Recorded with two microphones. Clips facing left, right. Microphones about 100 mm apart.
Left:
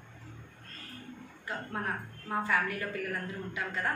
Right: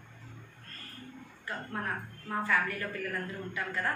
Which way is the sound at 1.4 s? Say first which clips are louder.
Left 1 dB; 20° left (ahead or behind).